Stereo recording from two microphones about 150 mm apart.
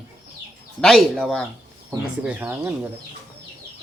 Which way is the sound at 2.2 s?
10° right (ahead or behind).